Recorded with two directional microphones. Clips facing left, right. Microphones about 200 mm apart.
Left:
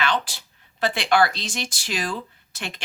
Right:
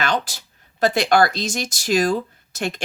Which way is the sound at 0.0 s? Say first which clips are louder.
Right 2 dB; 45° right (ahead or behind).